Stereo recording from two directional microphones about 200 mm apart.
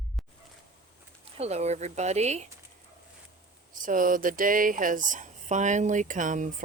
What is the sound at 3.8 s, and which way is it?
Speech, 40° right (ahead or behind).